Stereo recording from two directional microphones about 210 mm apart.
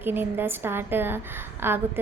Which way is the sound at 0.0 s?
10° right (ahead or behind).